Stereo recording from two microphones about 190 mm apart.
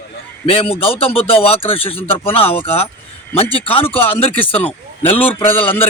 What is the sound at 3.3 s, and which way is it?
Speech, 30° left (ahead or behind).